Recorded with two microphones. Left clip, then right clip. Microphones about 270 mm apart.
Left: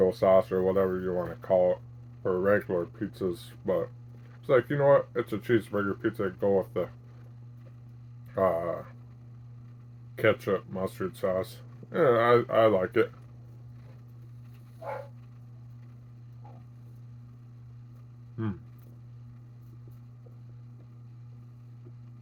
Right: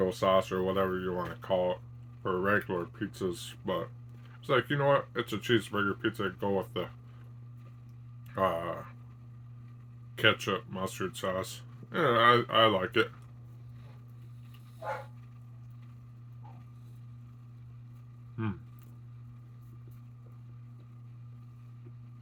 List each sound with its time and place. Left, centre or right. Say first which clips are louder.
0.0 s speech: left 5 dB; centre
8.4 s speech: left 4 dB; centre
10.2 s speech: left 2 dB; centre